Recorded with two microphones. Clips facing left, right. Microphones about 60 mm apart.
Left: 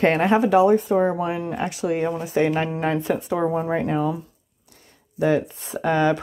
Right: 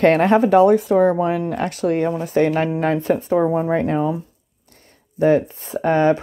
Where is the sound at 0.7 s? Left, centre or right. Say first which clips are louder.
Right 4 dB; right.